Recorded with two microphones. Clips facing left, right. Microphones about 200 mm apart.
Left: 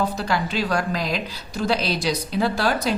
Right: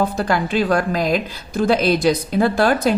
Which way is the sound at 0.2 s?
50° right (ahead or behind).